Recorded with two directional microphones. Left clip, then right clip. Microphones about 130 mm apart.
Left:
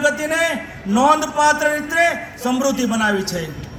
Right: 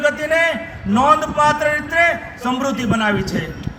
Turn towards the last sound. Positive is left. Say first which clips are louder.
# even
turn(degrees=-50)  # may be behind; listen again after turning